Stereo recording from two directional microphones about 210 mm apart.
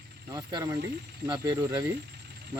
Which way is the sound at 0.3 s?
15° right (ahead or behind).